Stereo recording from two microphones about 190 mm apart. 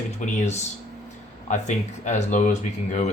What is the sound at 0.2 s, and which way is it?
Speech, 35° left (ahead or behind).